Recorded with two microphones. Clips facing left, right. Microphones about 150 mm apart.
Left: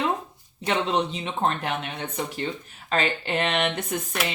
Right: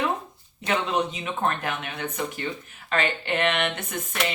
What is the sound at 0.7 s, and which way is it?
Speech, 30° left (ahead or behind).